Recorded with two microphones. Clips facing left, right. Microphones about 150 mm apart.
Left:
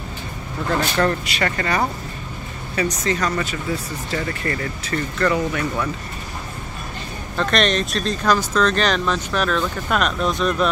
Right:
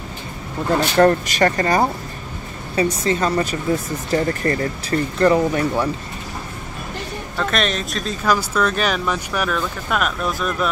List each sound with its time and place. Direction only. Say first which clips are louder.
0.7 s speech: right 5 dB; 35° right (ahead or behind)
7.3 s speech: left 2 dB; centre (ahead or behind)